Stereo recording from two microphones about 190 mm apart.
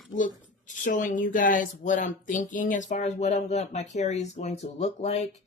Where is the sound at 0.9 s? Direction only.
45° left (ahead or behind).